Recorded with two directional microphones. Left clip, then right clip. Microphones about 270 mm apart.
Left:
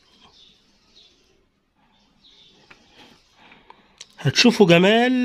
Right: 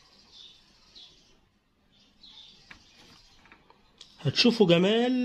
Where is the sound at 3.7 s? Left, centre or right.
Left.